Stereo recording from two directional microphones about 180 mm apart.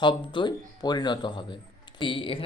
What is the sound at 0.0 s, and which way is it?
Speech, 25° left (ahead or behind).